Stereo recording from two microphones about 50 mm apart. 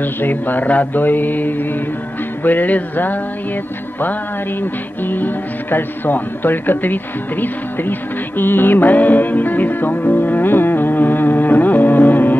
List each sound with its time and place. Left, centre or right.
0.0 s music: left